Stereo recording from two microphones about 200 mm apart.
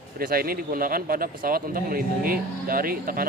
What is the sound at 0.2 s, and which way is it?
Speech, 50° right (ahead or behind).